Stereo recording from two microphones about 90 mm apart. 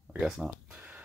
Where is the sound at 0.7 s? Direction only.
15° right (ahead or behind).